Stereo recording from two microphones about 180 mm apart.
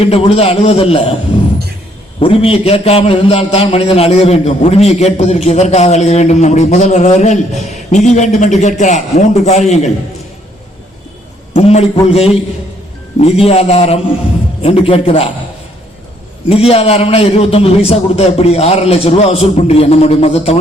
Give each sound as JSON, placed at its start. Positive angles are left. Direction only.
{"t": 0.0, "sound": "a man's voice", "side_deg": 35}
{"t": 2.1, "sound": "a man's voice", "side_deg": 30}
{"t": 11.5, "sound": "a man's voice", "side_deg": 35}
{"t": 16.5, "sound": "a man's voice", "side_deg": 35}